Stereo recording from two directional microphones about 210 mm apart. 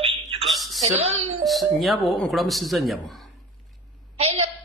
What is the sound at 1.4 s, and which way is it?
A man's voice, centre (ahead or behind).